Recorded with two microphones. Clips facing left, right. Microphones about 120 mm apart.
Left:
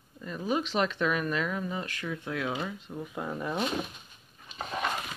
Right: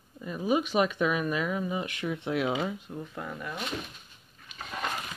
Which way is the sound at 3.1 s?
25° left (ahead or behind).